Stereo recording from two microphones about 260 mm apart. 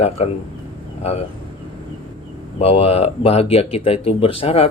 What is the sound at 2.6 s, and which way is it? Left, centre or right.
Speech, left.